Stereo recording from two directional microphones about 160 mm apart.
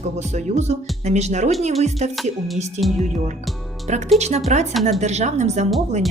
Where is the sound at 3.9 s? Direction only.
45° right (ahead or behind).